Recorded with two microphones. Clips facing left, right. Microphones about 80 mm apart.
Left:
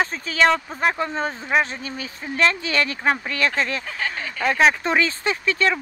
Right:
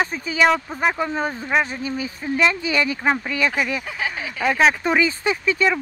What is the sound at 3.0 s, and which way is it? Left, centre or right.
Speech, centre.